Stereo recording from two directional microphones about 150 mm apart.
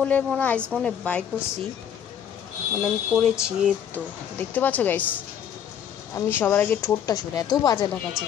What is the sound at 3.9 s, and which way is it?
A woman's voice, 10° left (ahead or behind).